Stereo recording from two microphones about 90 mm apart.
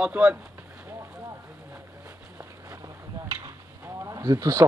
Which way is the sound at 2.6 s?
40° right (ahead or behind).